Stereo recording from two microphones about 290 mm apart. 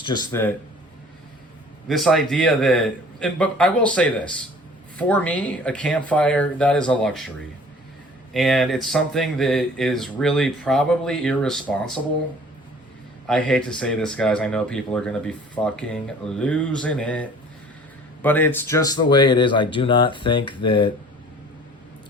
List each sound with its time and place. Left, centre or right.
0.0 s speech: centre
1.9 s speech: centre
8.3 s speech: centre
13.2 s speech: centre